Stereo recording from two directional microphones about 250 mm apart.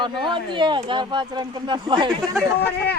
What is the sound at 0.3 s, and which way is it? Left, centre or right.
Speech, centre.